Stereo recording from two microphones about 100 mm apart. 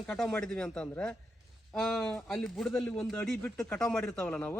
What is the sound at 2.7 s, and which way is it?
Speech, 25° left (ahead or behind).